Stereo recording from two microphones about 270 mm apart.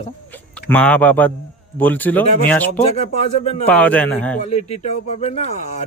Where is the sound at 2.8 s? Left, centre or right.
Left.